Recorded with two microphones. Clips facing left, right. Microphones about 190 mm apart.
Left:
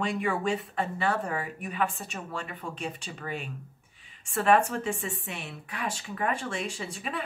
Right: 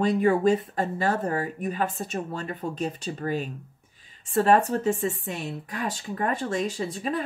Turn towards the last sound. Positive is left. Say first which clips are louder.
# right 7 dB
turn(degrees=-40)  # may be behind; listen again after turning